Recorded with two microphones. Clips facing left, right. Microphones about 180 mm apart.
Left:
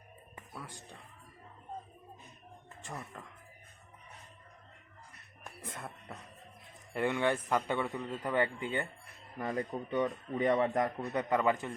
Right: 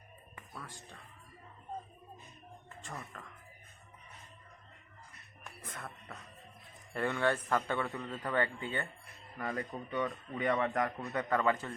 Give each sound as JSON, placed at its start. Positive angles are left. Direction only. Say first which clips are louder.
{"t": 0.3, "sound": "whispering", "louder": "left 2 dB", "side_deg": 20}
{"t": 2.8, "sound": "a man's voice", "louder": "left 2 dB", "side_deg": 15}
{"t": 5.6, "sound": "a man's voice", "louder": "left 2 dB", "side_deg": 20}